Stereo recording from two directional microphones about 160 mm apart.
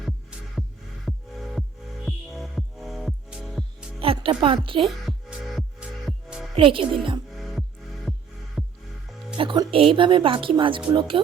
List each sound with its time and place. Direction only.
0.0 s music: centre (ahead or behind)
4.0 s speech: 35° right (ahead or behind)
4.9 s music: centre (ahead or behind)
6.6 s speech: 35° right (ahead or behind)
7.3 s music: centre (ahead or behind)
9.4 s speech: 30° right (ahead or behind)